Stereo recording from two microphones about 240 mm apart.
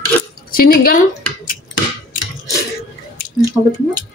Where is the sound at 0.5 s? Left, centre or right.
Left.